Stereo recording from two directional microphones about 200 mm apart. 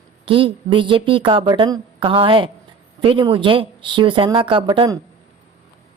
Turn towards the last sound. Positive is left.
turn(degrees=-25)  # may be behind; listen again after turning